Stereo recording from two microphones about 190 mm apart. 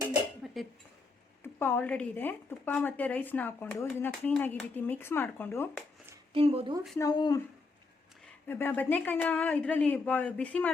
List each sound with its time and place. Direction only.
0.4 s cough: centre (ahead or behind)
1.5 s speech: 10° left (ahead or behind)
6.3 s speech: 30° right (ahead or behind)
7.0 s speech: 20° left (ahead or behind)
8.4 s speech: 10° left (ahead or behind)